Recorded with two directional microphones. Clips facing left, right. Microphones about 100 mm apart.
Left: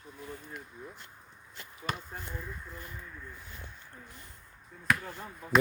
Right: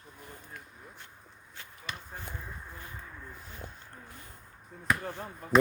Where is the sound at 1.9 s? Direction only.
45° left (ahead or behind).